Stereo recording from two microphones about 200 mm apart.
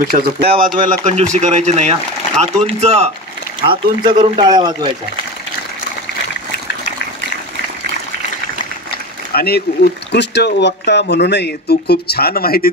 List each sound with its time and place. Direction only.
0.0 s speech: 50° right (ahead or behind)
0.7 s a man's voice: 40° right (ahead or behind); by 4.9 s 20° right (ahead or behind)
9.3 s speech: 50° left (ahead or behind)